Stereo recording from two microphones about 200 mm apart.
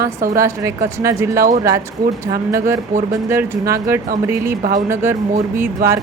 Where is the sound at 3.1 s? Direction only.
15° right (ahead or behind).